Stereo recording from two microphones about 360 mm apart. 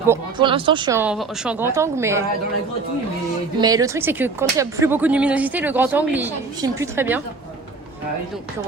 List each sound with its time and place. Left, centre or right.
0.1 s speech: centre
3.6 s speech: centre